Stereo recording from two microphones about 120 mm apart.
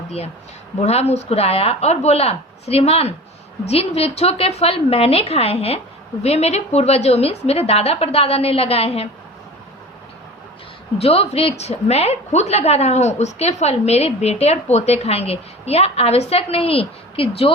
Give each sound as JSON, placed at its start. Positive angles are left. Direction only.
{"t": 0.9, "sound": "a woman's voice", "side_deg": 65}
{"t": 10.9, "sound": "a woman's voice", "side_deg": 55}